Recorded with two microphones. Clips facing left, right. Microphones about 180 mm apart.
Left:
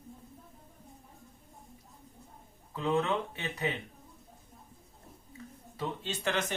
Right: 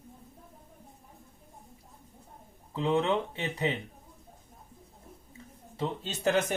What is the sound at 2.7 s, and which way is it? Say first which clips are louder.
Speech: right 3 dB; 25° right (ahead or behind).